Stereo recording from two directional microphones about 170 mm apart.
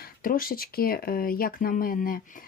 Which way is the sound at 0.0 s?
55° left (ahead or behind).